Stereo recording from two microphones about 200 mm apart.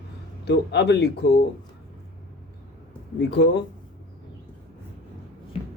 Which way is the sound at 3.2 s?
60° left (ahead or behind).